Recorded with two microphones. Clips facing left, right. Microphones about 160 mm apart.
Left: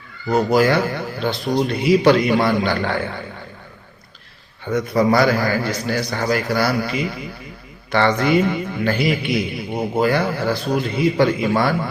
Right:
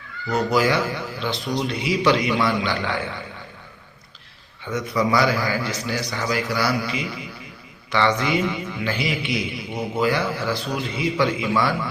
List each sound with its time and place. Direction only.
0.5 s a man's voice: 50° left (ahead or behind)
4.6 s a man's voice: 50° left (ahead or behind)